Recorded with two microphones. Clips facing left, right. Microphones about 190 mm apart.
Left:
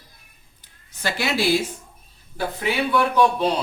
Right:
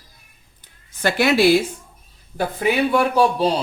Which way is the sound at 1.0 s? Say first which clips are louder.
Right 7 dB; 60° right (ahead or behind).